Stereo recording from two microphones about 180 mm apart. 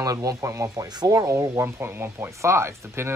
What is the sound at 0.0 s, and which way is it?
Speech, 20° right (ahead or behind).